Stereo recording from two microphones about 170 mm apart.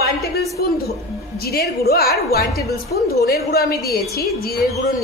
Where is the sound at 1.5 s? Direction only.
65° left (ahead or behind).